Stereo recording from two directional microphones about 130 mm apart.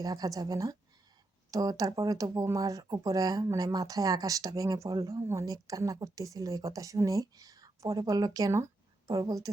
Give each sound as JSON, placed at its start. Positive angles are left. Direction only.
{"t": 0.0, "sound": "speech", "side_deg": -30}